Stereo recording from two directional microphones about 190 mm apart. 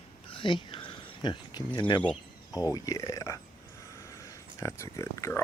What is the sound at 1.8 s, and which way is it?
Speech, 25° left (ahead or behind).